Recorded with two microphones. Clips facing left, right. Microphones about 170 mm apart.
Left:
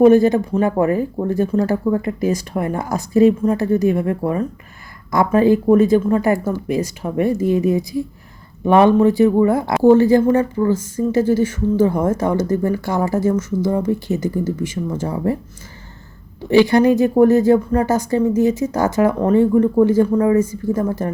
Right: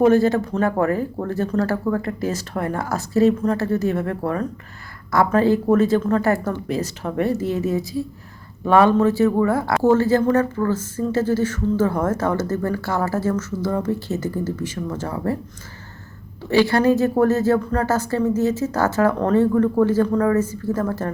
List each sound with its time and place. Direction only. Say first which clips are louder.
0.0 s speech: left 4 dB; 15° left (ahead or behind)
16.4 s speech: left 4 dB; 15° left (ahead or behind)